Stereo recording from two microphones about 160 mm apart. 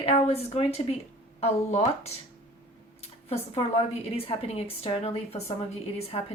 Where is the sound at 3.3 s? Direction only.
40° left (ahead or behind).